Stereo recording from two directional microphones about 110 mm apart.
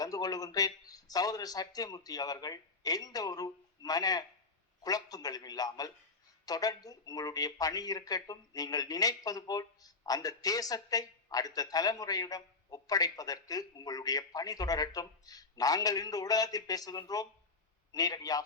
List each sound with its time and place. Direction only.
0.0 s speech: 35° left (ahead or behind)